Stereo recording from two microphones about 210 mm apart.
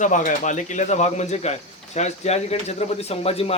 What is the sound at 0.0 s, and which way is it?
Speech, 35° left (ahead or behind).